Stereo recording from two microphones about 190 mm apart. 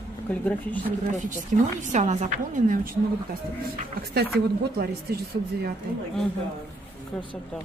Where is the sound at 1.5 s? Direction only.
40° right (ahead or behind).